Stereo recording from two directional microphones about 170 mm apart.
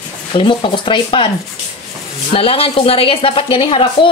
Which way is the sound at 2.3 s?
35° left (ahead or behind).